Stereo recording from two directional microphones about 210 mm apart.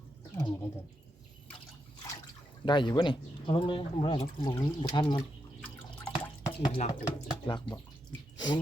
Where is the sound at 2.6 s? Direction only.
20° left (ahead or behind).